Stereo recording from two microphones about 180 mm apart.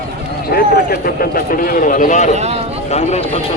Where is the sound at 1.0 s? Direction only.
55° left (ahead or behind).